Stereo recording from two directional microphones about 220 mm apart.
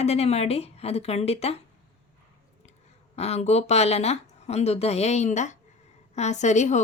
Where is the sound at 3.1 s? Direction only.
30° left (ahead or behind).